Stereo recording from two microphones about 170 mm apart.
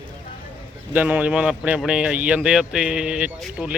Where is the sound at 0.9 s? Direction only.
10° right (ahead or behind).